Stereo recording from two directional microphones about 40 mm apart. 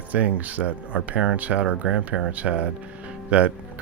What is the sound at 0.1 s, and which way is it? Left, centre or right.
Speech, right.